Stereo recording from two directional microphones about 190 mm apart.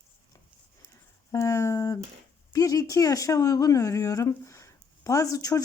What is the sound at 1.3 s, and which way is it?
Speech, 15° left (ahead or behind).